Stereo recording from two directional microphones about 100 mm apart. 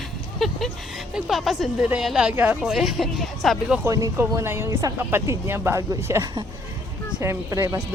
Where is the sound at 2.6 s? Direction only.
5° right (ahead or behind).